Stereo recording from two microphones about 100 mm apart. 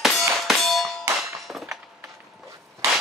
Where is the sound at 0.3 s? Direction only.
Centre (ahead or behind).